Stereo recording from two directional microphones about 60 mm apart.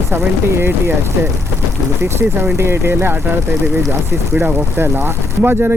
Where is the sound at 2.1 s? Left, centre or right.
Right.